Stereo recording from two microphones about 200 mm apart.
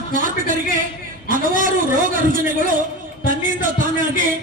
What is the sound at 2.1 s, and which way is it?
A man's voice, 45° right (ahead or behind).